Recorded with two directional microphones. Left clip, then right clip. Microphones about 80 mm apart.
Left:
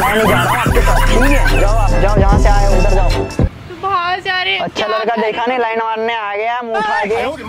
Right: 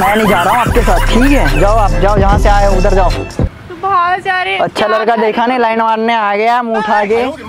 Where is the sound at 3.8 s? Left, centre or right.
Right.